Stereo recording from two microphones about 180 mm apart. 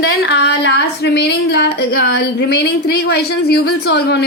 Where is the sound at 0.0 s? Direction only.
70° left (ahead or behind).